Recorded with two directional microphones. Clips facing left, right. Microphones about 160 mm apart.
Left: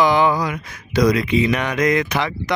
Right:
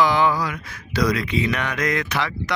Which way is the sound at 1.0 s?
20° left (ahead or behind).